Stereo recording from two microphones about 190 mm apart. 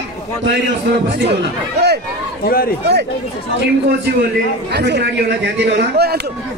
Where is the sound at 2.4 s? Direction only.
50° left (ahead or behind).